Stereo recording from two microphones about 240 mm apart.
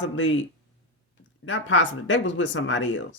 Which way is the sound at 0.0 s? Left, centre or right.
Left.